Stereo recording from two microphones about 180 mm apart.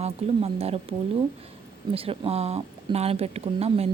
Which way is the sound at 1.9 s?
30° right (ahead or behind).